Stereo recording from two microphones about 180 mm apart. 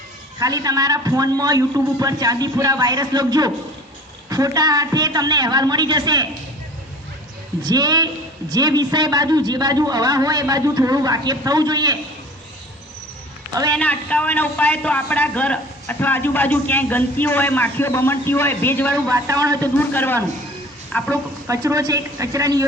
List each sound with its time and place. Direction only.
0.3 s a man's voice: 20° right (ahead or behind)
7.6 s a man's voice: 20° right (ahead or behind)
13.7 s a man's voice: 5° left (ahead or behind)
19.0 s a man's voice: 20° right (ahead or behind)
19.6 s a man's voice: 10° left (ahead or behind)
21.4 s a woman's voice: 15° right (ahead or behind)